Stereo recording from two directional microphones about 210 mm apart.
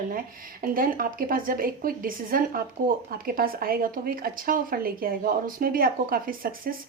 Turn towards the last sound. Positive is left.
turn(degrees=-45)  # may be behind; listen again after turning